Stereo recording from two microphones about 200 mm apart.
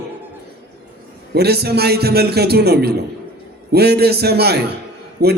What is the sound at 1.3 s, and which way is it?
A man's voice, 55° right (ahead or behind).